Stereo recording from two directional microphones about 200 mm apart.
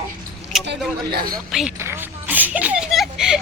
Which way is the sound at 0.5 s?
Centre (ahead or behind).